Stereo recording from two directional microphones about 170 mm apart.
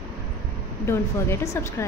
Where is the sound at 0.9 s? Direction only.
15° left (ahead or behind).